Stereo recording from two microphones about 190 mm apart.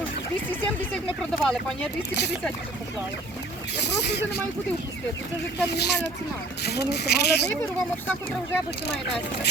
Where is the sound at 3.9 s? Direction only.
60° left (ahead or behind).